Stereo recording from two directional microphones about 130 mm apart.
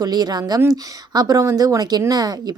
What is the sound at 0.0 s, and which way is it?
A woman's voice, 30° right (ahead or behind).